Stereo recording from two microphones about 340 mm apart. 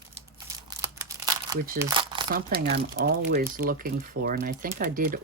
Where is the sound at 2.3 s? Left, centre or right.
Right.